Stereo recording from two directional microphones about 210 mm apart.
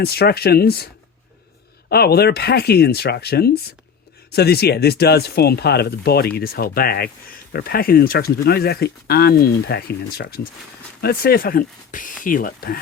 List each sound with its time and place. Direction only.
0.0 s speech: 50° left (ahead or behind)
1.9 s speech: 50° left (ahead or behind)